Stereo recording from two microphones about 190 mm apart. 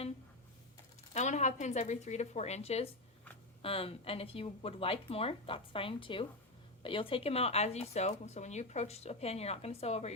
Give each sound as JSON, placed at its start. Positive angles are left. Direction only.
{"t": 1.1, "sound": "speech", "side_deg": 40}